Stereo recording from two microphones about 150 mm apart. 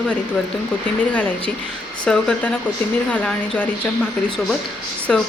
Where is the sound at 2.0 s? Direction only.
5° left (ahead or behind).